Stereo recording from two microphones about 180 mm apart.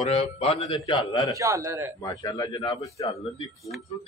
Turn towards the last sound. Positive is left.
turn(degrees=30)  # may be behind; listen again after turning